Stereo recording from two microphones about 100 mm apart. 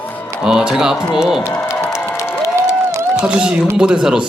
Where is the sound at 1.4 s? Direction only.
25° left (ahead or behind).